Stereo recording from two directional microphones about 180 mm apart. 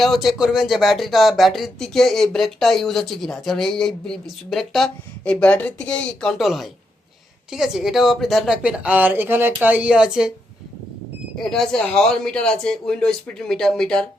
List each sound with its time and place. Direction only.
0.0 s speech: centre (ahead or behind)
11.3 s speech: centre (ahead or behind)